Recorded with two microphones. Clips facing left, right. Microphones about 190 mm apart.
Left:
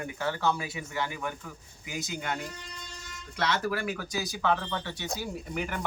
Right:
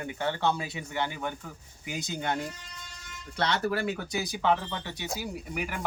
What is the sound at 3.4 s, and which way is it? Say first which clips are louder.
Speech: right 1 dB; 30° right (ahead or behind).